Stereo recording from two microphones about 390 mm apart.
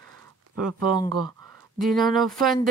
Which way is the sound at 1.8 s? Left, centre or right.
Centre.